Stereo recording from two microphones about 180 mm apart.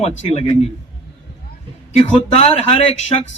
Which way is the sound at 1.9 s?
35° left (ahead or behind).